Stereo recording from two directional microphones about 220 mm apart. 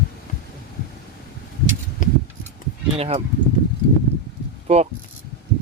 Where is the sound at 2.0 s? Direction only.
35° left (ahead or behind).